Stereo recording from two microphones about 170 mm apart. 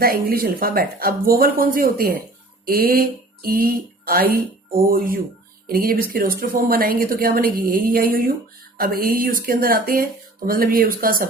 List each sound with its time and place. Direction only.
0.0 s a woman's voice: 60° right (ahead or behind)